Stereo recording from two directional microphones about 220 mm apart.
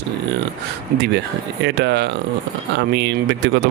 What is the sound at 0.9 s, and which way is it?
Speech, 50° right (ahead or behind).